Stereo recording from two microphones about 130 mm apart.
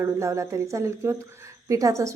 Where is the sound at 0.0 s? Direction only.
25° right (ahead or behind).